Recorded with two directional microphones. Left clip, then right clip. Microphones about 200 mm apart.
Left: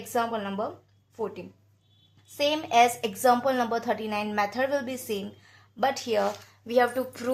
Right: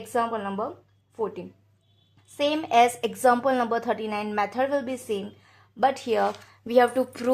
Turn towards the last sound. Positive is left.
turn(degrees=-45)  # may be behind; listen again after turning